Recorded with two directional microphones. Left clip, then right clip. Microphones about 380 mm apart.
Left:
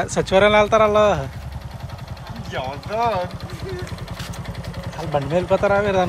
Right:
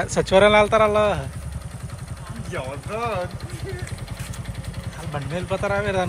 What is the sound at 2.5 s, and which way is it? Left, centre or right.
Speech, left.